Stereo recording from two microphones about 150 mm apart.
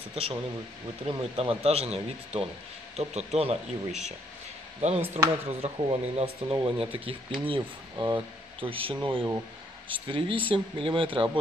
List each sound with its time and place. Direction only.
0.1 s speech: 40° right (ahead or behind)
5.2 s speech: 30° right (ahead or behind)
5.6 s speech: 40° right (ahead or behind)